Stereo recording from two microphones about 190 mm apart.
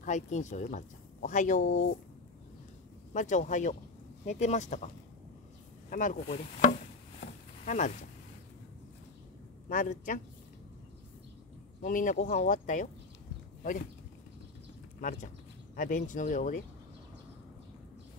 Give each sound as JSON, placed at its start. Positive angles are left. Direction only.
{"t": 0.0, "sound": "speech", "side_deg": 40}
{"t": 1.7, "sound": "speech", "side_deg": 60}
{"t": 3.1, "sound": "speech", "side_deg": 40}
{"t": 5.9, "sound": "chopping", "side_deg": 45}
{"t": 9.7, "sound": "speech", "side_deg": 45}
{"t": 11.8, "sound": "speech", "side_deg": 45}
{"t": 15.0, "sound": "speech", "side_deg": 45}